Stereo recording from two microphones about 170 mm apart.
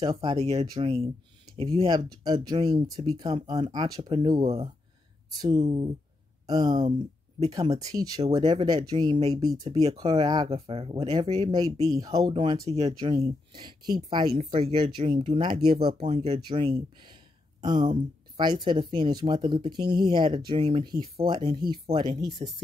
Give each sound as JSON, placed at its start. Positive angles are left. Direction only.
{"t": 0.0, "sound": "speech", "side_deg": -25}
{"t": 0.6, "sound": "speech", "side_deg": -35}
{"t": 13.5, "sound": "speech", "side_deg": -25}
{"t": 17.8, "sound": "speech", "side_deg": -45}
{"t": 18.4, "sound": "speech", "side_deg": -25}